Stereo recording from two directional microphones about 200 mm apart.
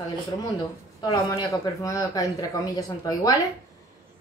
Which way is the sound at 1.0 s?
20° left (ahead or behind).